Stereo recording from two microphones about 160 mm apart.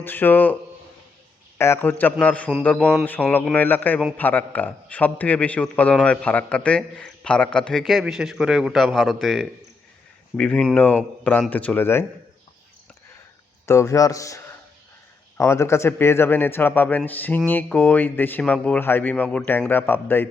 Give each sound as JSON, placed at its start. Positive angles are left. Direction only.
{"t": 0.0, "sound": "a man's voice", "side_deg": 10}
{"t": 1.5, "sound": "a man's voice", "side_deg": 15}
{"t": 13.7, "sound": "a man's voice", "side_deg": 20}